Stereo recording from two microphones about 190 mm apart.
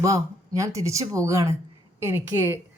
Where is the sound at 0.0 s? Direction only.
15° right (ahead or behind).